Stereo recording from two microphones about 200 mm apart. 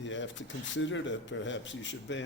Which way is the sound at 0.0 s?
65° left (ahead or behind).